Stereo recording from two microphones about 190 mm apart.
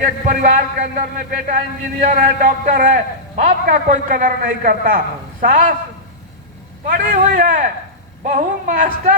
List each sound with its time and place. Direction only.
0.0 s a man's voice: 40° right (ahead or behind)
6.8 s a man's voice: 45° right (ahead or behind)